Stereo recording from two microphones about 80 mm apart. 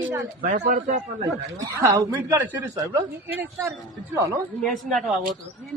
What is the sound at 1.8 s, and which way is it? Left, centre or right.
A man's voice, right.